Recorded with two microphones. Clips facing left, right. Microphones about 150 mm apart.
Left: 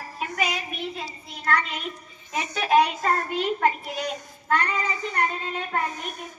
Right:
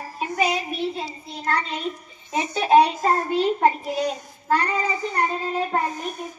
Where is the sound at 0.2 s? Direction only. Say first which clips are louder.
Right 5 dB; 30° right (ahead or behind).